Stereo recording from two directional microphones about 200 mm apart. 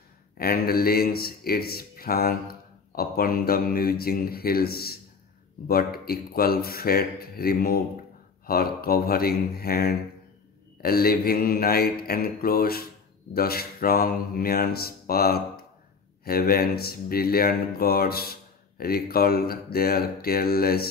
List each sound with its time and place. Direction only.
0.4 s speech: 50° left (ahead or behind)